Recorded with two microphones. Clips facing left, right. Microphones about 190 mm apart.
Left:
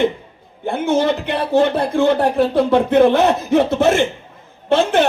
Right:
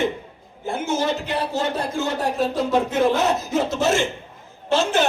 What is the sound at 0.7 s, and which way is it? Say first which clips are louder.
A man's voice: left 6 dB; 60° left (ahead or behind).